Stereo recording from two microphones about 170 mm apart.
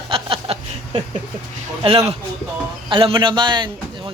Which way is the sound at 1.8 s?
35° right (ahead or behind).